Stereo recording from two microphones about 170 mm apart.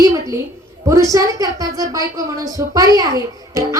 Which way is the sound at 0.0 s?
15° right (ahead or behind).